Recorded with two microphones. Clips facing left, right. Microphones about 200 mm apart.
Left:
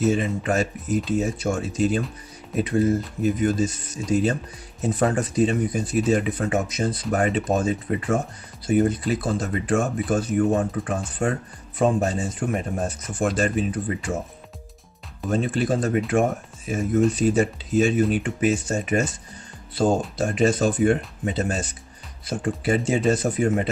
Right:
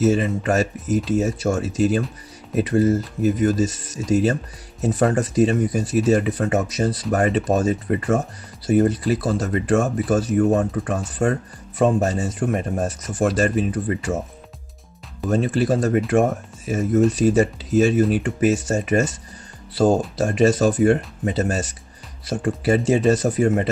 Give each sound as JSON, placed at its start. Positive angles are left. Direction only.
{"t": 0.1, "sound": "speech", "side_deg": -40}
{"t": 15.2, "sound": "speech", "side_deg": -40}